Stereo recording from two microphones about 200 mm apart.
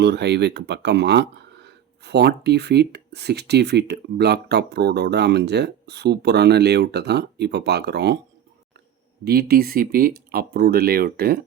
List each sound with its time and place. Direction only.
0.0 s speech: 55° right (ahead or behind)
9.2 s speech: 50° right (ahead or behind)